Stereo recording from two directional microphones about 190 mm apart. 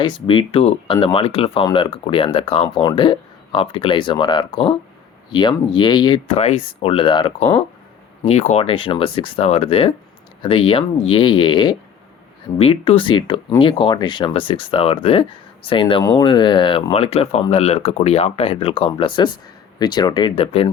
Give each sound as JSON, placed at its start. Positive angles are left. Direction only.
{"t": 0.0, "sound": "speech", "side_deg": 25}
{"t": 6.4, "sound": "speech", "side_deg": 35}